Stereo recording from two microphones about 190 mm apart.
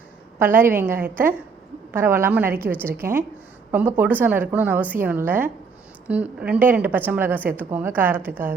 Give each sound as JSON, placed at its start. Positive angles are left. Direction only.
{"t": 0.3, "sound": "speech", "side_deg": -10}